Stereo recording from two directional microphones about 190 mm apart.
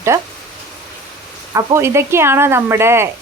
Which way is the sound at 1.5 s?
15° right (ahead or behind).